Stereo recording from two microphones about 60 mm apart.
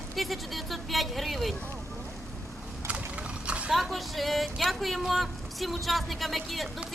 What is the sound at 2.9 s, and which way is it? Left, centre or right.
Boat, centre.